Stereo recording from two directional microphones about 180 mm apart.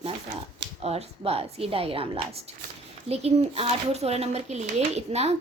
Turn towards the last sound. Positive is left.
turn(degrees=-35)  # may be behind; listen again after turning